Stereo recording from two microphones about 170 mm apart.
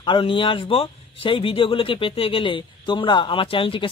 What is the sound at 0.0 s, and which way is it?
Speech, 30° left (ahead or behind).